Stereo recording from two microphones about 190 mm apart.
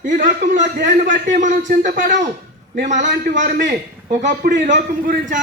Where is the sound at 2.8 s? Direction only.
40° right (ahead or behind).